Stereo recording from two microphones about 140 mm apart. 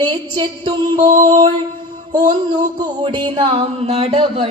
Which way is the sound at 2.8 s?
35° right (ahead or behind).